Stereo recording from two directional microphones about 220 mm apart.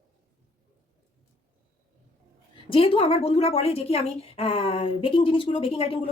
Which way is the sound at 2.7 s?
25° left (ahead or behind).